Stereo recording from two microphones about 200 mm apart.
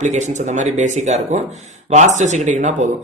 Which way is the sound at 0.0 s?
35° right (ahead or behind).